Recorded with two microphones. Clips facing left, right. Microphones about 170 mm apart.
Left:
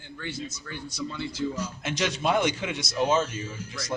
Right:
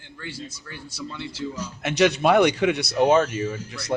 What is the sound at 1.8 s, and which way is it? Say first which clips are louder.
Speech: right 11 dB; 65° right (ahead or behind).